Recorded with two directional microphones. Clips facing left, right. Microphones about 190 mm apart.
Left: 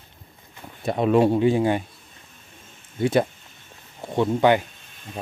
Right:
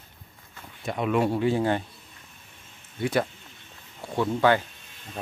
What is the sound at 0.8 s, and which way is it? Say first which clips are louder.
Speech: left 6 dB; 35° left (ahead or behind).